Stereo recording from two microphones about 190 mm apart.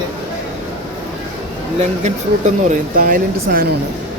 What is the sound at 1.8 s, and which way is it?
Speech, 35° right (ahead or behind).